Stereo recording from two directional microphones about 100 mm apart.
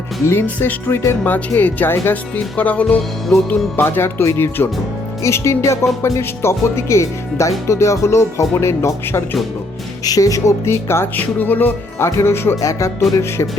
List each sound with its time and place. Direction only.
0.3 s speech: 20° left (ahead or behind)
3.2 s music: 5° left (ahead or behind)
3.8 s speech: 25° left (ahead or behind)